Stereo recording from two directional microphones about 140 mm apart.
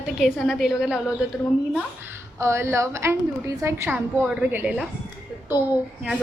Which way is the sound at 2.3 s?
20° right (ahead or behind).